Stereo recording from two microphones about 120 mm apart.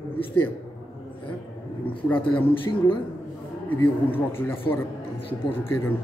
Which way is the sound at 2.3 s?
45° left (ahead or behind).